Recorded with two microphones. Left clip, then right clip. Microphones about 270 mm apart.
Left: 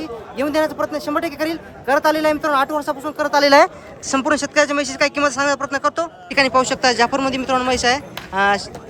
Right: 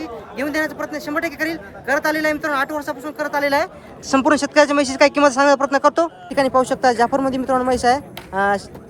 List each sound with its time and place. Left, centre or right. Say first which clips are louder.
0.3 s speech: left 3 dB; centre
3.4 s speech: left 8 dB; left
4.0 s speech: right 2 dB; centre